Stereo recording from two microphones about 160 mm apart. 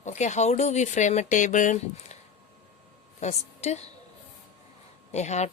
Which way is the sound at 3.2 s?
45° left (ahead or behind).